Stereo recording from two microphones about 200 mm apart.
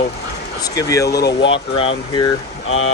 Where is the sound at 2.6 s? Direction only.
85° left.